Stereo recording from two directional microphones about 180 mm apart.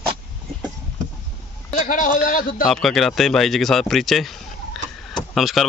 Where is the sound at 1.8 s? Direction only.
45° left (ahead or behind).